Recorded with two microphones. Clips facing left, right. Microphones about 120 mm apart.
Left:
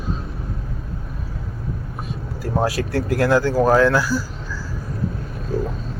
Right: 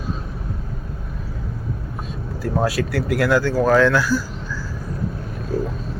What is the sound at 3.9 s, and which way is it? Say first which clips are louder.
Speech: even; 40° left (ahead or behind).